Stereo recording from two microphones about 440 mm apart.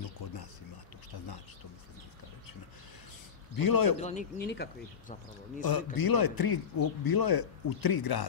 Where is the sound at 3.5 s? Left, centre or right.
Left.